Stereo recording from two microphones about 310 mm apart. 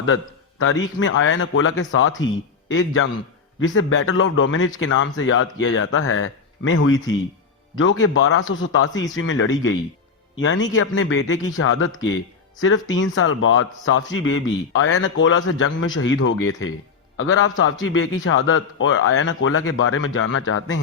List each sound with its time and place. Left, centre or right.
0.6 s a man's voice: left